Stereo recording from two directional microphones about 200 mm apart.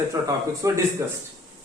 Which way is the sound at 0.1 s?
15° right (ahead or behind).